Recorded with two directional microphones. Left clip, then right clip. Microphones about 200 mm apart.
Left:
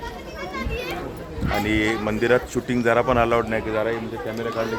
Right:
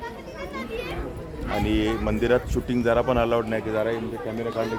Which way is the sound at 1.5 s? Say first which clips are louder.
Left 3 dB; 10° left (ahead or behind).